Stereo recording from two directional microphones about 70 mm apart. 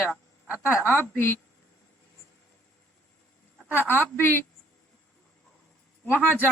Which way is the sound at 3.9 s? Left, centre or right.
Left.